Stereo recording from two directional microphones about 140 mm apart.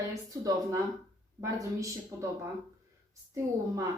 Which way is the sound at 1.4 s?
20° right (ahead or behind).